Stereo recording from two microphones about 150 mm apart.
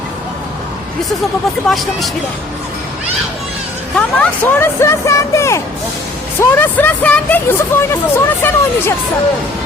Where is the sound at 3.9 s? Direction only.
10° left (ahead or behind).